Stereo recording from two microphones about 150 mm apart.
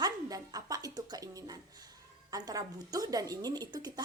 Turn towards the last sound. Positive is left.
turn(degrees=-25)  # may be behind; listen again after turning